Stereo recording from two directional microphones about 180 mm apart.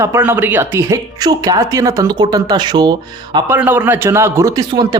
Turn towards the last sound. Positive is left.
turn(degrees=-20)  # may be behind; listen again after turning